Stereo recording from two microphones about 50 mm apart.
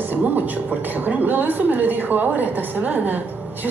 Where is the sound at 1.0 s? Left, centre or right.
Right.